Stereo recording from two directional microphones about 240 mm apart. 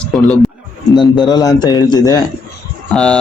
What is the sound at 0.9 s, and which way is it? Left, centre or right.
A man's voice, centre.